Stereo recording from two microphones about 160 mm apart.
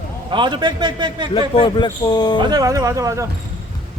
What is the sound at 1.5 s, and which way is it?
Speech, 30° left (ahead or behind).